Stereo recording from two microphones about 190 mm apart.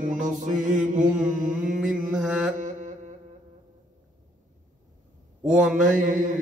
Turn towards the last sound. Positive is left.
turn(degrees=-45)  # may be behind; listen again after turning